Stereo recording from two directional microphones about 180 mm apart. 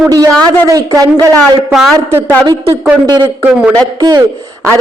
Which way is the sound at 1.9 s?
15° right (ahead or behind).